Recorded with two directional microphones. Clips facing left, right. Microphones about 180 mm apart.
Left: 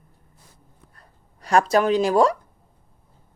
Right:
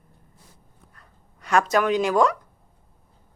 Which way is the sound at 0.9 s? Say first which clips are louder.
Left 1 dB; 35° left (ahead or behind).